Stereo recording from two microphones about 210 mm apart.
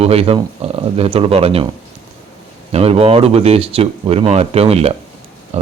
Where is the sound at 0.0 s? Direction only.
30° right (ahead or behind).